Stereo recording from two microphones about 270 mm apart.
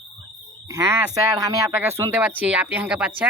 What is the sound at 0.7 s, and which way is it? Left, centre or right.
Speech, centre.